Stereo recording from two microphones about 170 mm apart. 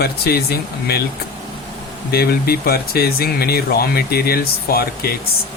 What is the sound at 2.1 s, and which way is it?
Speech, 65° left (ahead or behind).